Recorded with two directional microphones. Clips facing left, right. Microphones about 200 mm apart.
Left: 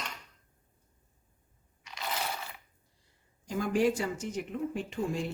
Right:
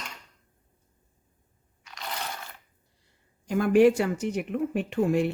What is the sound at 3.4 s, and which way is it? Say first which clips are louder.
Speech: right 8 dB; 65° right (ahead or behind).